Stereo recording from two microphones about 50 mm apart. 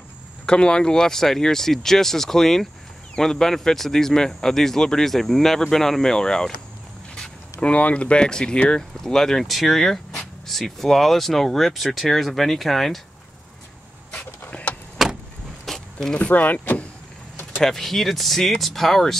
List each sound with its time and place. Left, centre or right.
0.5 s a man's voice: centre
7.6 s speech: left; by 13.0 s centre
14.5 s vehicle: left
15.0 s vehicle: centre
15.6 s a sound: centre
16.2 s speech: left
17.6 s speech: centre